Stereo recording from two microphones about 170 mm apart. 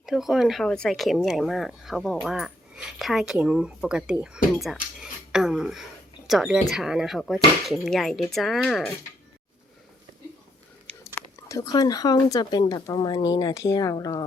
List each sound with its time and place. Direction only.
0.0 s speech: centre (ahead or behind)
11.0 s speech: 15° left (ahead or behind)